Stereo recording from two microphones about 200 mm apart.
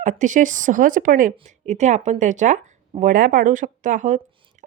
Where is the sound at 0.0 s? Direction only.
40° right (ahead or behind).